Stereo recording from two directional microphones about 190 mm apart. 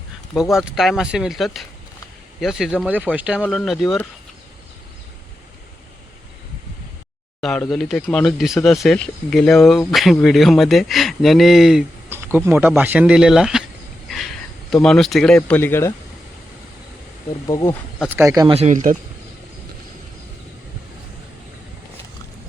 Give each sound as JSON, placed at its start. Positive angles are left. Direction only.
{"t": 0.3, "sound": "speech", "side_deg": 0}
{"t": 7.4, "sound": "speech", "side_deg": 5}
{"t": 12.0, "sound": "speech", "side_deg": -10}
{"t": 17.4, "sound": "speech", "side_deg": 20}
{"t": 18.1, "sound": "speech", "side_deg": -15}
{"t": 18.5, "sound": "speech", "side_deg": -35}